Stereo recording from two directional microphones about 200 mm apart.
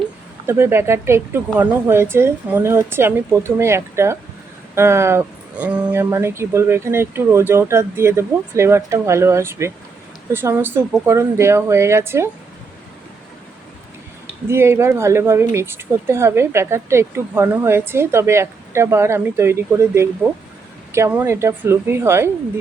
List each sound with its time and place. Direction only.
0.4 s speech: 10° right (ahead or behind)
14.5 s speech: 15° right (ahead or behind)